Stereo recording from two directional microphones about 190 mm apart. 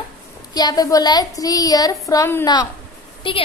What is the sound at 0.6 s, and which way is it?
A woman's voice, 20° left (ahead or behind).